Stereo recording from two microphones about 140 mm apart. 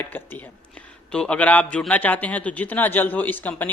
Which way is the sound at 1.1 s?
10° left (ahead or behind).